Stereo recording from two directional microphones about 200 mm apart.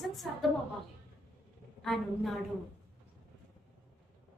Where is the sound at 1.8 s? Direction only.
Centre (ahead or behind).